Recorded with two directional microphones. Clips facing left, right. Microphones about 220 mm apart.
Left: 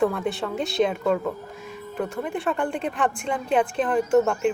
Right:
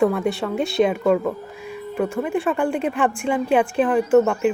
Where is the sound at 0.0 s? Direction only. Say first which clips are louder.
Right 4 dB; 5° right (ahead or behind).